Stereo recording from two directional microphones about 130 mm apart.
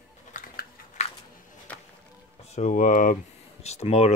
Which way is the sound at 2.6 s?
80° left.